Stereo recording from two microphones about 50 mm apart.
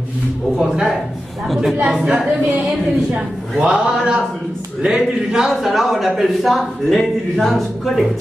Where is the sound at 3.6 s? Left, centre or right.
Centre.